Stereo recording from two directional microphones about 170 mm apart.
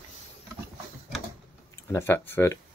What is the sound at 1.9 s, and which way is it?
Speech, 15° left (ahead or behind).